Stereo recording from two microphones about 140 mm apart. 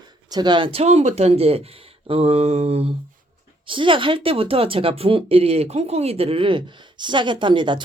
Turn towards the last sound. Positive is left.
turn(degrees=-35)  # may be behind; listen again after turning